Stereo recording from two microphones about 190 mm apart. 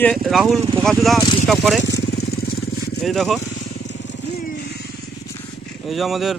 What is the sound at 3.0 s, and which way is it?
Speech, centre (ahead or behind).